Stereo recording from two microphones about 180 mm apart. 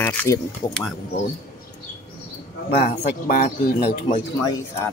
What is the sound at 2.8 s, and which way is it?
Speech, 55° left (ahead or behind).